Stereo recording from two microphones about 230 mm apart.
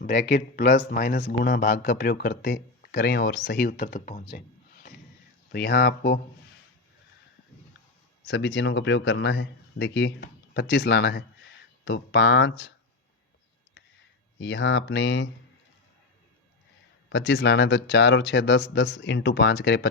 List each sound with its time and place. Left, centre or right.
0.0 s speech: left
4.3 s a sound: left
5.5 s speech: left
8.2 s speech: left
14.3 s speech: left
17.1 s speech: left